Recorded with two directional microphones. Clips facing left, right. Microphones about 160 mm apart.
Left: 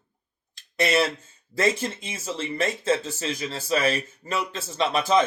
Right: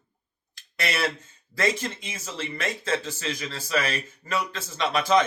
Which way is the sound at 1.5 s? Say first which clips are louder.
Left 2 dB; 30° left (ahead or behind).